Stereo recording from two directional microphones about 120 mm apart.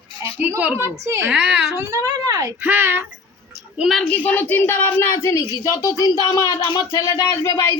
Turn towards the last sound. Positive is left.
turn(degrees=25)  # may be behind; listen again after turning